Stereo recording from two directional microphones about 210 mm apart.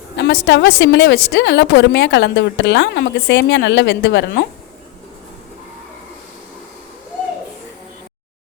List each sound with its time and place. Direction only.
0.2 s a woman's voice: 55° left (ahead or behind)